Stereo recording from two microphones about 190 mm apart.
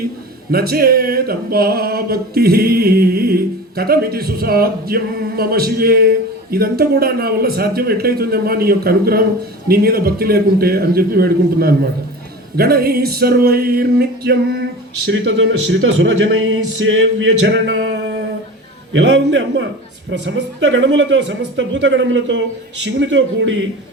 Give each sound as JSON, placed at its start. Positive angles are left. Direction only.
{"t": 0.5, "sound": "male singing", "side_deg": -55}
{"t": 18.9, "sound": "speech", "side_deg": -70}